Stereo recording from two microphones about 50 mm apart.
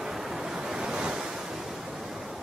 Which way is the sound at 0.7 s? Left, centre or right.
Centre.